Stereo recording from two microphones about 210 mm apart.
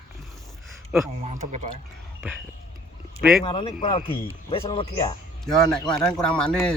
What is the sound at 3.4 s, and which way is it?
Speech, 25° left (ahead or behind).